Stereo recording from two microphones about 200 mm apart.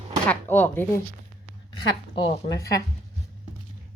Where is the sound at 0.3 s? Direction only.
10° left (ahead or behind).